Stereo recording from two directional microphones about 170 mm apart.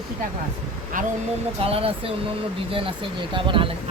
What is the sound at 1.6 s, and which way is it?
Speech, 35° right (ahead or behind).